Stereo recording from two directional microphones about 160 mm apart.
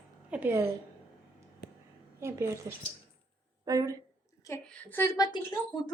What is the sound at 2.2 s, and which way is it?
Speech, 15° right (ahead or behind).